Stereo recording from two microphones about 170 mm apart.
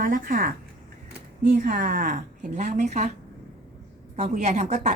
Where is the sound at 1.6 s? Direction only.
50° right (ahead or behind).